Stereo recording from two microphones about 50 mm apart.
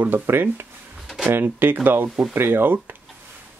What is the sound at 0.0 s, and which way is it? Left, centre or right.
Speech, right.